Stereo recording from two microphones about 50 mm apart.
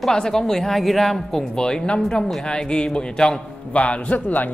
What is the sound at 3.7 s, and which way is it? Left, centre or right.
Speech, left.